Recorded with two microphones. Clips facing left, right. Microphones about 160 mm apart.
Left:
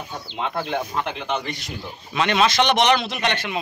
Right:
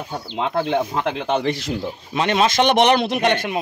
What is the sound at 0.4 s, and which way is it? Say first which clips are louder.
Speech: right 5 dB; 90° right.